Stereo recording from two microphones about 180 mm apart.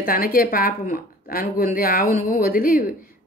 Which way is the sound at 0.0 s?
55° left (ahead or behind).